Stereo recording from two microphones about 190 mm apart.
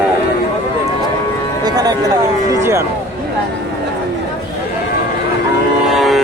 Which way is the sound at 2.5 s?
15° right (ahead or behind).